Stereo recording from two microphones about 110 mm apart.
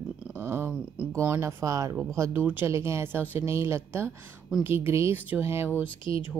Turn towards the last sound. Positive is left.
turn(degrees=50)  # may be behind; listen again after turning